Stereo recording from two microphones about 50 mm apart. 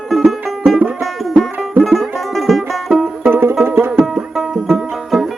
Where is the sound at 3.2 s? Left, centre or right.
Right.